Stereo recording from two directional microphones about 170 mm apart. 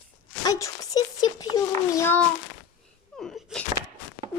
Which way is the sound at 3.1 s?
5° left (ahead or behind).